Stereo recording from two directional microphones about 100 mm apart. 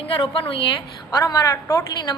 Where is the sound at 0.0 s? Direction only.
65° left (ahead or behind).